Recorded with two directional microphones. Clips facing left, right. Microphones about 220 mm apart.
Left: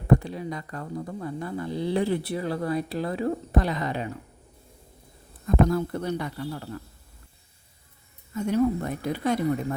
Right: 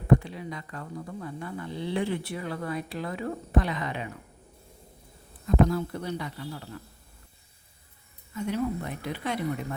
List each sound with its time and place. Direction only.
0.1 s speech: 40° left (ahead or behind)
5.6 s speech: 50° left (ahead or behind)
8.4 s speech: 45° left (ahead or behind)